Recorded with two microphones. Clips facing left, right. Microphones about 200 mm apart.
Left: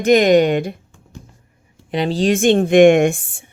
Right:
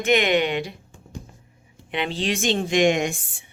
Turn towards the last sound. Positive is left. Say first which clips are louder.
# left 10 dB
turn(degrees=50)  # may be behind; listen again after turning